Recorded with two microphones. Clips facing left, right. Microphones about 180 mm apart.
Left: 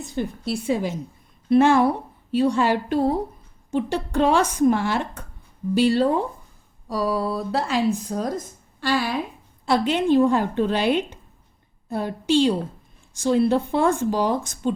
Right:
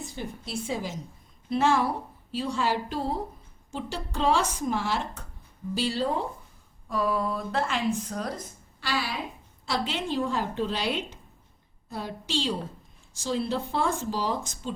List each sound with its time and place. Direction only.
0.2 s speech: 60° left (ahead or behind)
6.8 s a woman's voice: 35° left (ahead or behind); by 14.7 s 60° left (ahead or behind)